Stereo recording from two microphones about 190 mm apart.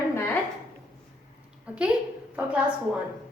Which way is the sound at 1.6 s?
5° right (ahead or behind).